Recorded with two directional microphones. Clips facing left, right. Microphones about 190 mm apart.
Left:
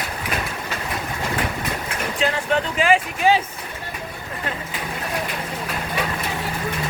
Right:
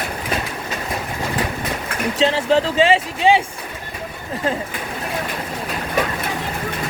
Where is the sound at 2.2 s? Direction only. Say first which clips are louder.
Right 5 dB; 30° right (ahead or behind).